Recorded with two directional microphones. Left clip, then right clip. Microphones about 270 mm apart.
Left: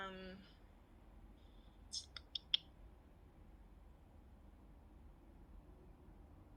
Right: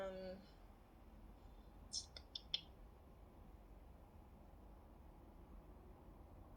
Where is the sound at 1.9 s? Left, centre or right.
Left.